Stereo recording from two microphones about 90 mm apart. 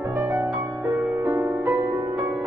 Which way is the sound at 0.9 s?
40° right (ahead or behind).